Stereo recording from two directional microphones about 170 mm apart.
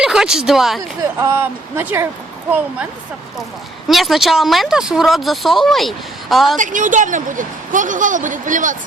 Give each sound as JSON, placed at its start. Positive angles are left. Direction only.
{"t": 0.0, "sound": "speech", "side_deg": -5}
{"t": 1.2, "sound": "speech", "side_deg": -15}
{"t": 3.8, "sound": "speech", "side_deg": 0}
{"t": 6.6, "sound": "speech", "side_deg": -50}